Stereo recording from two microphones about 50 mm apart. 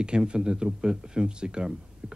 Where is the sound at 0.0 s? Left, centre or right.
Centre.